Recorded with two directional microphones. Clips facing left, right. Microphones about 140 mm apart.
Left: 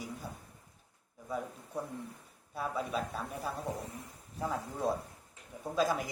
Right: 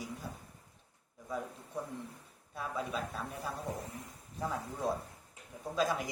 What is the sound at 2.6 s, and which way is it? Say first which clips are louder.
Speech: left 3 dB; 5° left (ahead or behind).